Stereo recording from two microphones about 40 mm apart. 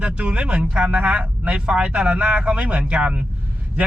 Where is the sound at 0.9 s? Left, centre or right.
Right.